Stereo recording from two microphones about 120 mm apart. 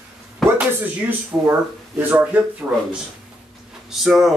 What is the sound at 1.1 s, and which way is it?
Speech, 15° right (ahead or behind).